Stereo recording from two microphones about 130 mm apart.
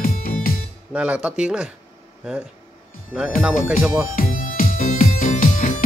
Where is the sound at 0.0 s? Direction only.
90° left.